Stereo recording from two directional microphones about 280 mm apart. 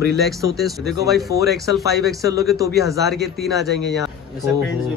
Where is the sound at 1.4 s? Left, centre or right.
Centre.